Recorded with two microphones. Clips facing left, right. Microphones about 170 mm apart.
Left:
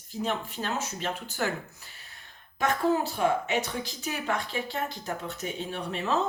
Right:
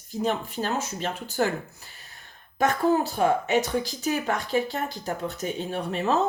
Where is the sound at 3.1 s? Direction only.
40° right (ahead or behind).